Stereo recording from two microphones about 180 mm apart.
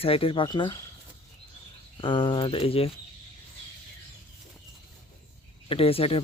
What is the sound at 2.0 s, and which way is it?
Speech, 30° left (ahead or behind).